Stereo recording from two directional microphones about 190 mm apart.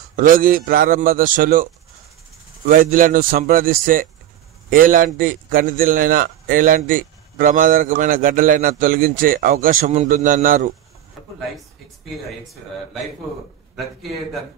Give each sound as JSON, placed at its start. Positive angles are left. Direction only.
{"t": 0.1, "sound": "a man's voice", "side_deg": -45}
{"t": 2.7, "sound": "a man's voice", "side_deg": -45}